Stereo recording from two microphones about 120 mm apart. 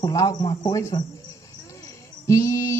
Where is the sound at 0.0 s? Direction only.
30° left (ahead or behind).